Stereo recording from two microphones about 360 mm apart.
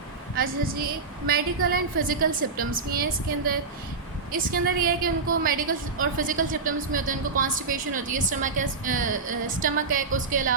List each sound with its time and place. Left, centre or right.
0.3 s a woman's voice: right